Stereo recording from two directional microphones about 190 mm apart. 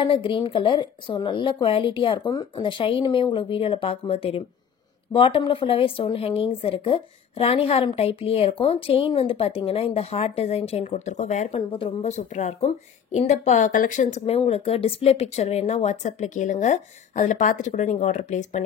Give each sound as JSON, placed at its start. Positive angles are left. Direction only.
{"t": 0.0, "sound": "a woman's voice", "side_deg": 25}